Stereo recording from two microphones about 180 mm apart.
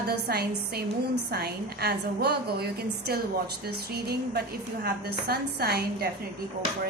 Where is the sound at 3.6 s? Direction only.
60° right (ahead or behind).